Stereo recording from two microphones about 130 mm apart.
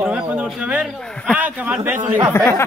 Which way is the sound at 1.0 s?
5° left (ahead or behind).